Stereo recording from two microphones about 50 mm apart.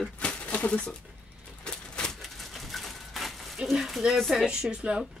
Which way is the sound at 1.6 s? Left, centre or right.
Centre.